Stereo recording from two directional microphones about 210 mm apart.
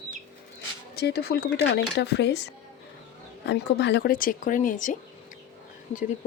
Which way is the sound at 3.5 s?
55° left (ahead or behind).